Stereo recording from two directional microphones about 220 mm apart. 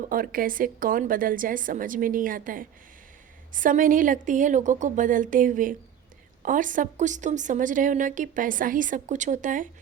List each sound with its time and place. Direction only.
0.1 s a woman's voice: 40° right (ahead or behind)